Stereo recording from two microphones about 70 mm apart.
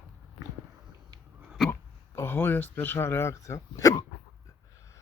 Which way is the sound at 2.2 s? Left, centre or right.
Left.